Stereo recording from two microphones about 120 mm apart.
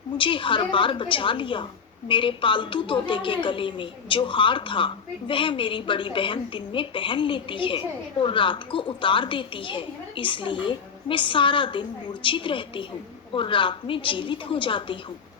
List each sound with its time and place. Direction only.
0.2 s a woman's voice: 45° left (ahead or behind)